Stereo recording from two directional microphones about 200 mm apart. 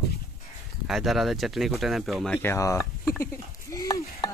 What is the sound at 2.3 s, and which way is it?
Speech, 15° left (ahead or behind).